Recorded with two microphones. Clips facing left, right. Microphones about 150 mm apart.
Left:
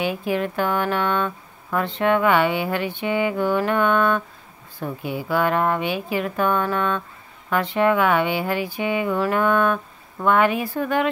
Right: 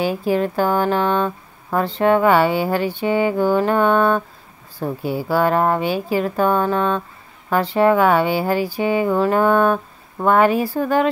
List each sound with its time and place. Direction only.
0.0 s mantra: 35° right (ahead or behind)